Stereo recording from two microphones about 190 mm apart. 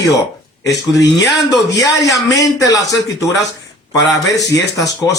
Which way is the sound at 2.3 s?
15° left (ahead or behind).